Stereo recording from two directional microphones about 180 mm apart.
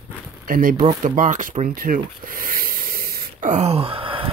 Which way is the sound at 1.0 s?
45° right (ahead or behind).